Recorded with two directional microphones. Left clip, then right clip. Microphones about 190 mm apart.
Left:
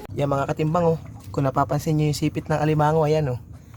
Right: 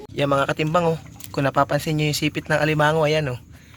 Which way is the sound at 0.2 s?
Centre (ahead or behind).